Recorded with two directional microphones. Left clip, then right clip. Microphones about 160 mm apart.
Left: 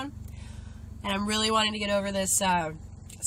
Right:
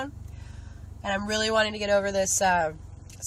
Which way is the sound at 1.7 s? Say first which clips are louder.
Right 4 dB; 5° left (ahead or behind).